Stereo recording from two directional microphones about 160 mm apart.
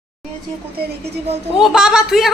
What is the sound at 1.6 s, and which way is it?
Speech, centre (ahead or behind).